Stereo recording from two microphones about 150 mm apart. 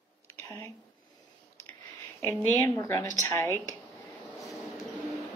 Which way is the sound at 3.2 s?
15° left (ahead or behind).